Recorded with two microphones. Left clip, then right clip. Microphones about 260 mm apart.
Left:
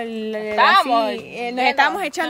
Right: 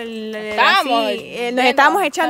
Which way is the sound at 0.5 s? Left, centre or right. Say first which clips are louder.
Even; right.